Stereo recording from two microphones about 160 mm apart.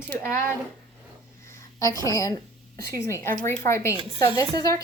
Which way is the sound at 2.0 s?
20° left (ahead or behind).